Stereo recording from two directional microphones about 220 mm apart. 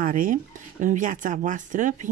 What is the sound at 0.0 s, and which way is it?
Speech, 40° right (ahead or behind).